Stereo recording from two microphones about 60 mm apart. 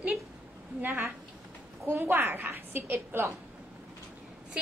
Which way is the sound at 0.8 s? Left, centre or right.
Right.